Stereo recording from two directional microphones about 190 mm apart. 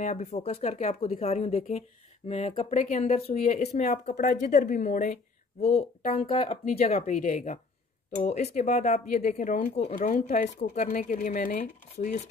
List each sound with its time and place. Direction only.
0.0 s speech: 40° left (ahead or behind)
7.0 s speech: 45° left (ahead or behind)